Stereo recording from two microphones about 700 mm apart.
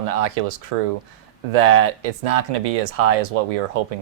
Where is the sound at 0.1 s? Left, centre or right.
Right.